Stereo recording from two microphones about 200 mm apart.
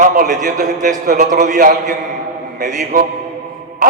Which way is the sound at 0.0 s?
40° right (ahead or behind).